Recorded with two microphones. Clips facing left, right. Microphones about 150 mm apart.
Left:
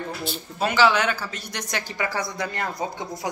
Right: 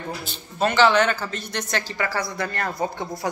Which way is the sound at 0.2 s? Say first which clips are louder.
Right 3 dB; 5° left (ahead or behind).